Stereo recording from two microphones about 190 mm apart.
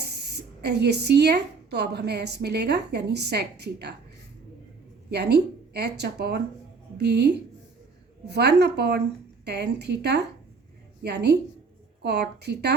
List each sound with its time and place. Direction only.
0.2 s speech: 60° right (ahead or behind)
5.1 s speech: 60° right (ahead or behind)